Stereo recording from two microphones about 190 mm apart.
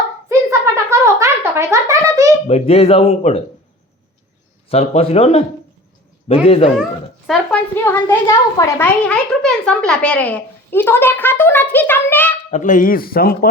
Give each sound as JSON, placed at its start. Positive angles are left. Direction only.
{"t": 0.3, "sound": "a sound", "side_deg": -15}
{"t": 2.5, "sound": "speech", "side_deg": 35}
{"t": 4.7, "sound": "speech", "side_deg": 35}
{"t": 7.3, "sound": "speech", "side_deg": 0}
{"t": 7.9, "sound": "a child's voice", "side_deg": 10}
{"t": 12.5, "sound": "speech", "side_deg": 40}